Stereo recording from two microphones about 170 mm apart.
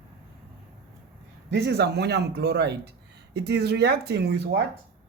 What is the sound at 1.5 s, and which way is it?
Speech, 75° right (ahead or behind).